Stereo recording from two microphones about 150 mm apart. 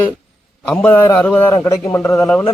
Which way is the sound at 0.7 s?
15° left (ahead or behind).